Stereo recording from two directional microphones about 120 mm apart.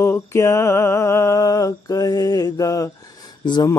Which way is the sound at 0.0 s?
20° left (ahead or behind).